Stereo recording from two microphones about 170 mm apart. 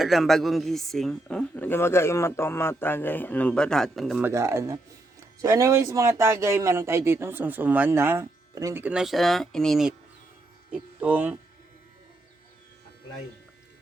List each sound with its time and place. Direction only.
0.0 s a woman's voice: centre (ahead or behind)
4.2 s speech: 15° right (ahead or behind); by 9.9 s centre (ahead or behind)
10.7 s speech: 10° right (ahead or behind)